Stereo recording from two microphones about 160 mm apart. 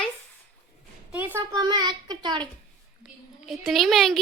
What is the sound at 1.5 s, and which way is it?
Child singing, 25° right (ahead or behind).